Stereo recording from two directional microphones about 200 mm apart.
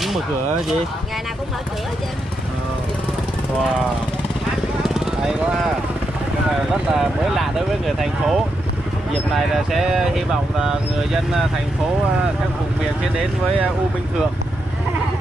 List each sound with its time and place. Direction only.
4.8 s vehicle: centre (ahead or behind)
6.7 s speech: centre (ahead or behind)